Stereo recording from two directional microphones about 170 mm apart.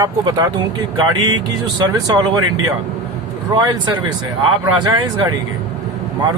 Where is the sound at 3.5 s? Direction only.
25° right (ahead or behind).